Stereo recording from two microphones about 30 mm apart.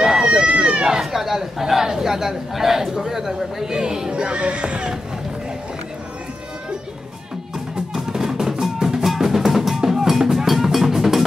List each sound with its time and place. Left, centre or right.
0.2 s speech: right
1.1 s a man's voice: centre
4.1 s speech: right
7.5 s drum: centre